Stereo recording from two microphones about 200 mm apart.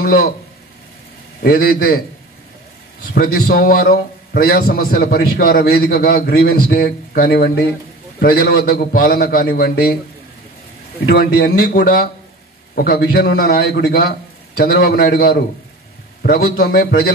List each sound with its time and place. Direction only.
1.4 s a man's voice: 50° left (ahead or behind)
11.1 s a man's voice: 45° left (ahead or behind)